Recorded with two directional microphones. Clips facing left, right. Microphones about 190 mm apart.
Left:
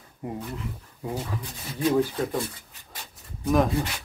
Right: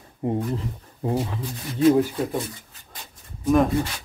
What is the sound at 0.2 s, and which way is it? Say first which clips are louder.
Speech: right 9 dB; 25° right (ahead or behind).